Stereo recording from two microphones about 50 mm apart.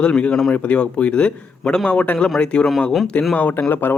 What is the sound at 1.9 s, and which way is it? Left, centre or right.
Speech, left.